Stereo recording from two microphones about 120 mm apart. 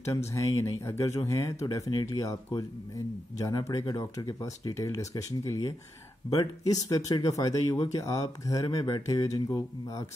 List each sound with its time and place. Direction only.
0.3 s speech: 25° left (ahead or behind)